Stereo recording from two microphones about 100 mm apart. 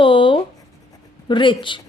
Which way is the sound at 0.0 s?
60° left (ahead or behind).